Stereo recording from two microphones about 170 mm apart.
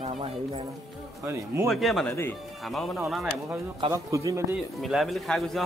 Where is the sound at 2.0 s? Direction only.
15° left (ahead or behind).